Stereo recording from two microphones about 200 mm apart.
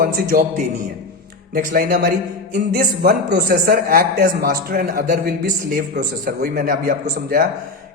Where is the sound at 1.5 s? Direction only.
50° right (ahead or behind).